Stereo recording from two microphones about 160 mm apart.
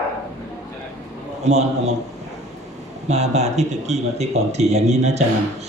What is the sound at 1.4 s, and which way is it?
Speech, 45° right (ahead or behind).